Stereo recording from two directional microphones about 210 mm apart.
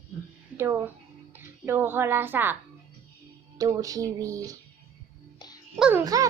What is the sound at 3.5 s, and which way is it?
A woman's voice, 15° right (ahead or behind).